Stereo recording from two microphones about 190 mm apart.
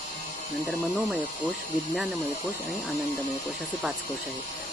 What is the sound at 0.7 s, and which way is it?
Speech, 5° right (ahead or behind).